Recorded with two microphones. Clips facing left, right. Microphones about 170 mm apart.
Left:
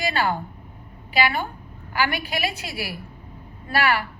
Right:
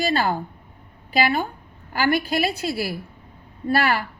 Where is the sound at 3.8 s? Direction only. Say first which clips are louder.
Left 1 dB; 40° right (ahead or behind).